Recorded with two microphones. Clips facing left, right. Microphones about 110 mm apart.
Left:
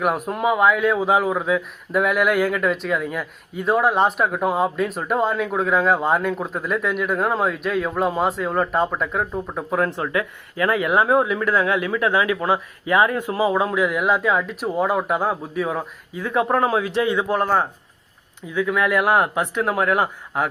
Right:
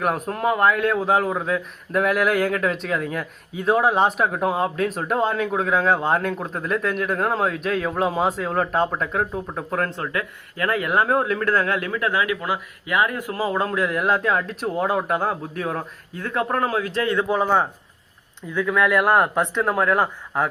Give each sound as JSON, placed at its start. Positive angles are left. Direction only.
{"t": 0.0, "sound": "a man's voice", "side_deg": 5}
{"t": 9.7, "sound": "speech", "side_deg": 15}
{"t": 13.5, "sound": "speech", "side_deg": 10}
{"t": 17.2, "sound": "a man's voice", "side_deg": 0}